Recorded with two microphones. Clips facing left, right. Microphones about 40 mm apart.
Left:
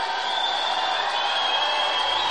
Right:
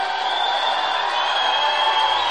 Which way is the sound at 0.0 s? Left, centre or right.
Centre.